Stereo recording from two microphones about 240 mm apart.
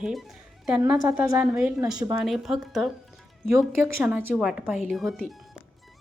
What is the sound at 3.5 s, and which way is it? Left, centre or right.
Speech, centre.